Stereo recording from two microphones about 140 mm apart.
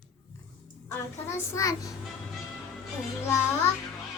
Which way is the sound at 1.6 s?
25° left (ahead or behind).